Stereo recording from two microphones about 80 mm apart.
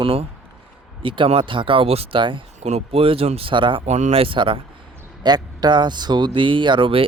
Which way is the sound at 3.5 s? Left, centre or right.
Right.